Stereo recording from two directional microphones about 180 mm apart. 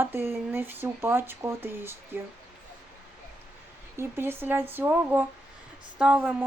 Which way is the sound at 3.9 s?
15° right (ahead or behind).